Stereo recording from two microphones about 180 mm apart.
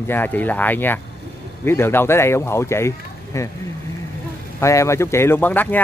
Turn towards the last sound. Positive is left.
turn(degrees=10)  # may be behind; listen again after turning